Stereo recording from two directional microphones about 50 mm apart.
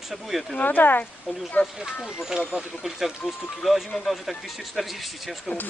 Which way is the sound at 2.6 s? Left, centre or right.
Centre.